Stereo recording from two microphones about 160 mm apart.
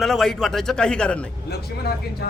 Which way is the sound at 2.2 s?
90° left.